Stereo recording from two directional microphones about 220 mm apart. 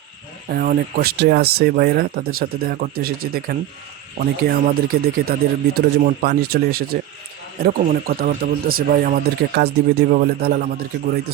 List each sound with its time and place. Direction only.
0.5 s speech: 40° right (ahead or behind)